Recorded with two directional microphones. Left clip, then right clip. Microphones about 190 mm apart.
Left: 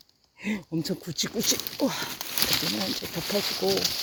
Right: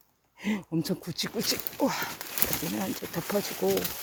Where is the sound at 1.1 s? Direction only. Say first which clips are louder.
Left 3 dB; 20° left (ahead or behind).